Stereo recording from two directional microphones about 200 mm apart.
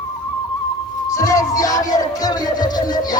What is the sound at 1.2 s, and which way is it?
Music, 15° left (ahead or behind).